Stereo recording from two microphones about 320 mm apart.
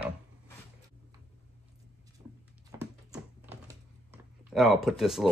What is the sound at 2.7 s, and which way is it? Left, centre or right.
Dog, centre.